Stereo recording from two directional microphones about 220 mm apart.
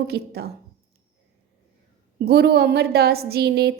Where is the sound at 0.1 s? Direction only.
45° right (ahead or behind).